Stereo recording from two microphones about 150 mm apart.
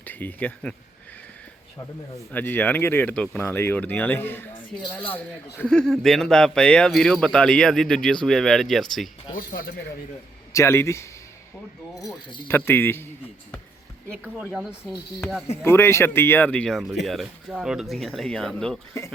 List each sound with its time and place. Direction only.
0.0 s speech: 10° left (ahead or behind)
2.3 s speech: 10° left (ahead or behind)
5.5 s speech: 5° left (ahead or behind)
9.3 s speech: 70° left (ahead or behind)
10.5 s a man's voice: 20° left (ahead or behind)
14.3 s speech: 5° right (ahead or behind)
15.6 s speech: 15° left (ahead or behind)